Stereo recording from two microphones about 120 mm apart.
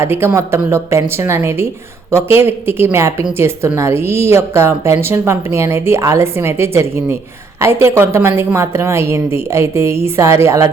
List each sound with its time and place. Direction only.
0.0 s speech: 20° right (ahead or behind)